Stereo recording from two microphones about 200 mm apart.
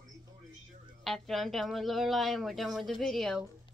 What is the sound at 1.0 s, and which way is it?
Speech, centre (ahead or behind).